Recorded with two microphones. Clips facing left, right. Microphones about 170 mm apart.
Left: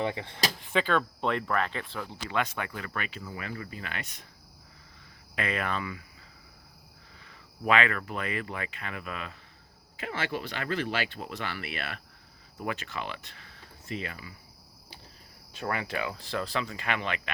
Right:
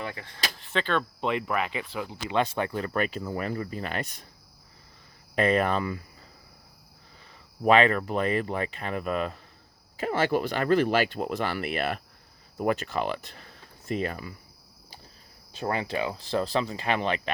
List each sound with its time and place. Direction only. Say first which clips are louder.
0.0 s speech: left 5 dB; 25° left (ahead or behind)
0.6 s speech: even; 10° left (ahead or behind)
1.3 s speech: right 1 dB; 10° right (ahead or behind)
2.3 s speech: right 5 dB; 30° right (ahead or behind)
5.3 s speech: right 8 dB; 35° right (ahead or behind)
7.6 s speech: right 6 dB; 35° right (ahead or behind)
15.5 s speech: right 4 dB; 30° right (ahead or behind)